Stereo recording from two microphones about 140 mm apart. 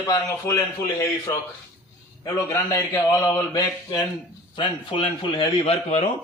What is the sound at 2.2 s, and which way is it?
A man's voice, 20° left (ahead or behind).